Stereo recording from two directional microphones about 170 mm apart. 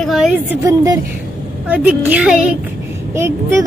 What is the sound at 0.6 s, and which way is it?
Speech, 20° right (ahead or behind).